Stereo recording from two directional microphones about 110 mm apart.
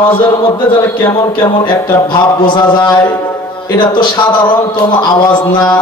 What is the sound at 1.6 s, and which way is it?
Speech, 45° left (ahead or behind).